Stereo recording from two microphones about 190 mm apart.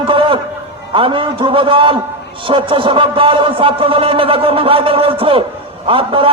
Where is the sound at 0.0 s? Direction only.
25° right (ahead or behind).